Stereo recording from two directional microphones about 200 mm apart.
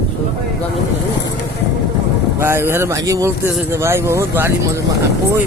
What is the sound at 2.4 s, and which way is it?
Speech, 10° right (ahead or behind).